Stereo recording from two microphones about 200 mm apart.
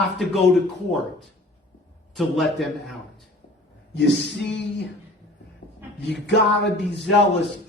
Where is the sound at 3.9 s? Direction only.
60° left (ahead or behind).